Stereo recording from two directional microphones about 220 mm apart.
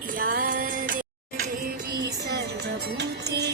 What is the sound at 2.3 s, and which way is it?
Music, 50° right (ahead or behind).